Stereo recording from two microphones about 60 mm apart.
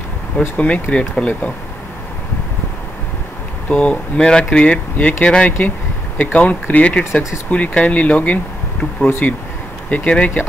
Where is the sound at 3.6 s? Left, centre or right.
Left.